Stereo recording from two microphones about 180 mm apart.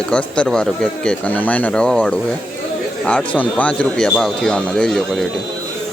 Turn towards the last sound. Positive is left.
turn(degrees=0)  # may be behind; listen again after turning